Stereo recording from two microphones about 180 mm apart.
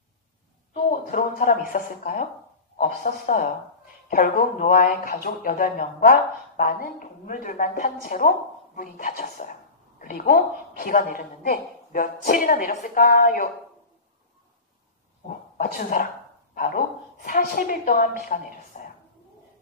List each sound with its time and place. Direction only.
0.8 s speech: 50° left (ahead or behind)
15.2 s speech: 55° left (ahead or behind)